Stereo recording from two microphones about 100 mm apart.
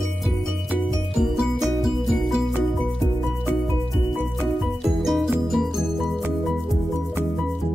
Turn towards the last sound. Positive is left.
turn(degrees=-5)  # may be behind; listen again after turning